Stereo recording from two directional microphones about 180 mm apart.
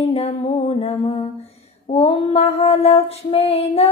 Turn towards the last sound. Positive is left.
turn(degrees=35)  # may be behind; listen again after turning